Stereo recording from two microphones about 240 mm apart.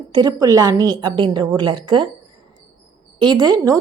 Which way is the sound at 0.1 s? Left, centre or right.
Centre.